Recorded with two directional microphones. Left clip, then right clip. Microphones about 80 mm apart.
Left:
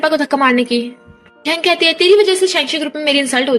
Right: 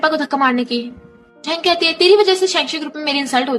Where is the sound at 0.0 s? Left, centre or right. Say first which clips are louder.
Left 2 dB; left.